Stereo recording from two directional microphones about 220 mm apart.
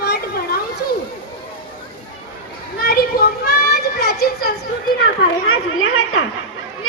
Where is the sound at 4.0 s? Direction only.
45° left (ahead or behind).